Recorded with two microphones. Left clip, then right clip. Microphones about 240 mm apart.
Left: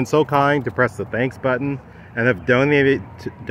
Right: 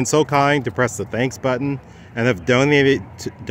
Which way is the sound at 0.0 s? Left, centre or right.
Centre.